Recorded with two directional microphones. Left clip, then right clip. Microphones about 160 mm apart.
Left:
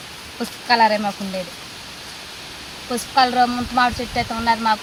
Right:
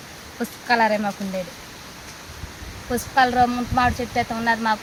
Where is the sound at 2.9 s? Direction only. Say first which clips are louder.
Left 1 dB; 5° right (ahead or behind).